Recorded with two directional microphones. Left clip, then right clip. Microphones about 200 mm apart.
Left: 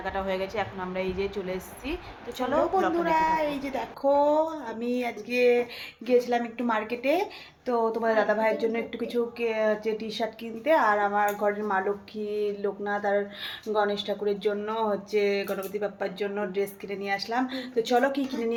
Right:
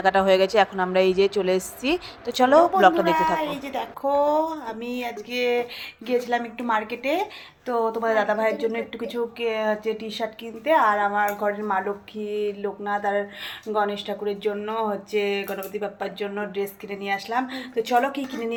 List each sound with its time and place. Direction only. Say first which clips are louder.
0.0 s a woman's voice: right 12 dB; 40° right (ahead or behind)
3.2 s speech: right 2 dB; centre (ahead or behind)